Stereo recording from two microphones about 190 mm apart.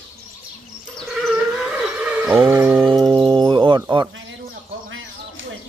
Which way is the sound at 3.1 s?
25° right (ahead or behind).